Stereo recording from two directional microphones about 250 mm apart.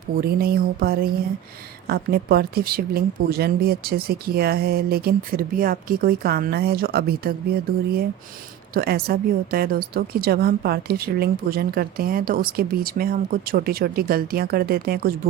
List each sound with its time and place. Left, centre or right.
0.2 s a woman's voice: right
8.7 s a woman's voice: right